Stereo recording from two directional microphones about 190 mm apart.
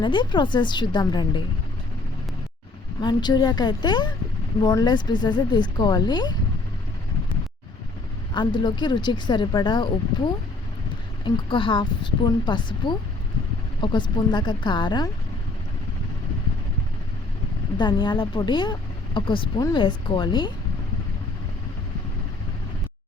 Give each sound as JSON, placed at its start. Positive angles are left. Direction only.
{"t": 0.0, "sound": "speech", "side_deg": 25}
{"t": 3.0, "sound": "speech", "side_deg": 25}
{"t": 8.3, "sound": "speech", "side_deg": 25}
{"t": 11.4, "sound": "speech", "side_deg": 25}
{"t": 17.7, "sound": "speech", "side_deg": 25}